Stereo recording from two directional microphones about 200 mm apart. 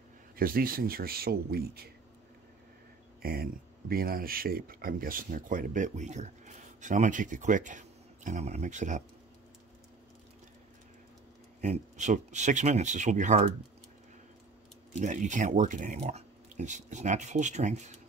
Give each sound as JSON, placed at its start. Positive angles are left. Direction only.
{"t": 0.4, "sound": "speech", "side_deg": -45}
{"t": 3.2, "sound": "speech", "side_deg": -50}
{"t": 11.6, "sound": "speech", "side_deg": -35}
{"t": 15.0, "sound": "speech", "side_deg": -40}